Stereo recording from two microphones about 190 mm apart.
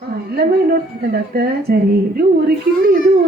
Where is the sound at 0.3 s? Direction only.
55° right (ahead or behind).